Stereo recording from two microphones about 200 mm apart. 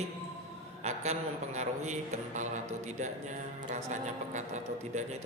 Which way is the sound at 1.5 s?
35° right (ahead or behind).